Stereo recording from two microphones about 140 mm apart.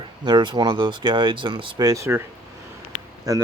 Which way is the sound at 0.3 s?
30° right (ahead or behind).